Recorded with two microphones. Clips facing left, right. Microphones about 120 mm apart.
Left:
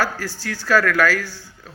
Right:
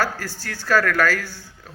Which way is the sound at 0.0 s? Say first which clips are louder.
Left 1 dB; 50° right (ahead or behind).